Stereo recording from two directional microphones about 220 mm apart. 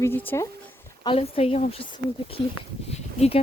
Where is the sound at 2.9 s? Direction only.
30° left (ahead or behind).